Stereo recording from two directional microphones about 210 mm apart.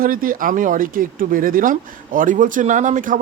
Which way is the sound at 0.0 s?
40° right (ahead or behind).